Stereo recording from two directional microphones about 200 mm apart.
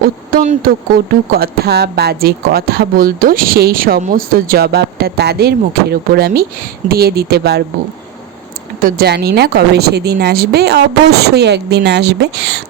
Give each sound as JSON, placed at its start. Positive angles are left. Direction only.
{"t": 0.3, "sound": "speech", "side_deg": -45}
{"t": 8.8, "sound": "a woman's voice", "side_deg": -50}